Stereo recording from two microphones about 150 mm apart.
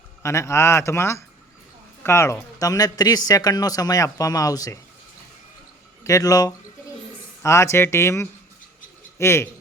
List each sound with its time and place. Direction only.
0.2 s a man's voice: 20° left (ahead or behind)
6.1 s a man's voice: 25° left (ahead or behind)